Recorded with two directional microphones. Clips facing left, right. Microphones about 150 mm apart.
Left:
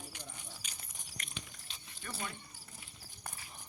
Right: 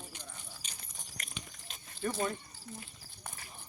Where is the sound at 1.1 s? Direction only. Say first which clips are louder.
Right 1 dB; 45° right (ahead or behind).